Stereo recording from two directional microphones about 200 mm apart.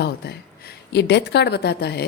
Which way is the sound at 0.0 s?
55° left (ahead or behind).